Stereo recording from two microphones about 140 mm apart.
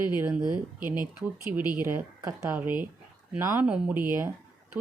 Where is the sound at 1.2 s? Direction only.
15° right (ahead or behind).